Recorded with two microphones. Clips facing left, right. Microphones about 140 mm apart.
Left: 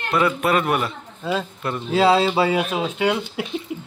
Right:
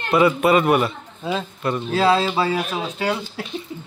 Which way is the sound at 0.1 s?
5° right (ahead or behind).